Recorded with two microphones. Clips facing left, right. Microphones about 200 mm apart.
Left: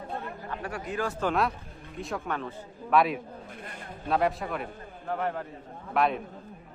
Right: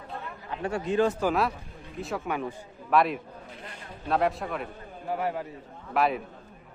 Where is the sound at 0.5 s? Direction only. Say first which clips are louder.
Right 8 dB; 25° right (ahead or behind).